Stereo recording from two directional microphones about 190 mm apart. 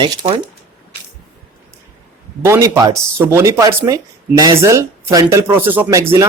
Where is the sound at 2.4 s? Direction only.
15° right (ahead or behind).